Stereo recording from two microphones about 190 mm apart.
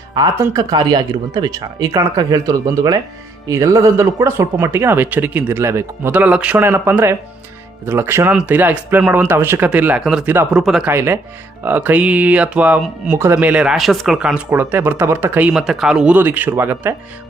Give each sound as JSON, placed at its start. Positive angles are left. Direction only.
{"t": 0.1, "sound": "speech", "side_deg": -20}